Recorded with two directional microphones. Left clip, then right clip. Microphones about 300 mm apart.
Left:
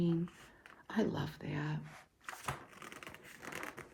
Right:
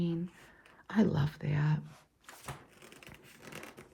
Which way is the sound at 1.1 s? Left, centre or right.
Centre.